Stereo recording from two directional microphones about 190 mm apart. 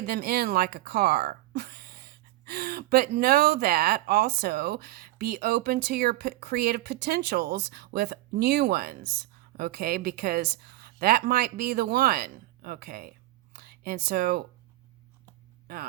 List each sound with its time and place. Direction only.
0.0 s a woman's voice: 55° right (ahead or behind)
15.6 s speech: 55° right (ahead or behind)